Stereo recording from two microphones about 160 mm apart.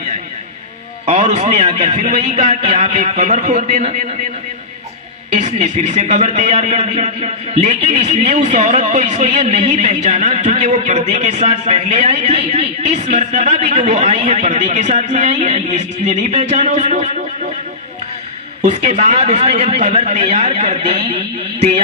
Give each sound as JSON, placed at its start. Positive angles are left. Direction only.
{"t": 1.0, "sound": "a man's voice", "side_deg": -45}
{"t": 5.3, "sound": "a man's voice", "side_deg": -45}
{"t": 18.6, "sound": "a man's voice", "side_deg": -45}